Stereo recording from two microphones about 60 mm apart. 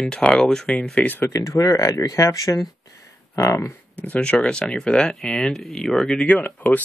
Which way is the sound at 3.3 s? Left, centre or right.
Left.